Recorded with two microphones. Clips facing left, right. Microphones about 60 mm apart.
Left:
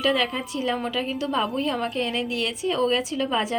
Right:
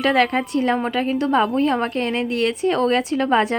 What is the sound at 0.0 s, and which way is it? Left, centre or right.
A woman's voice, right.